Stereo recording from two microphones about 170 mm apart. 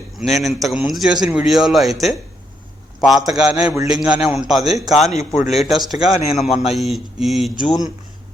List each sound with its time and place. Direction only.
0.2 s a man's voice: centre (ahead or behind)
6.1 s speech: 40° left (ahead or behind)
6.7 s a man's voice: centre (ahead or behind)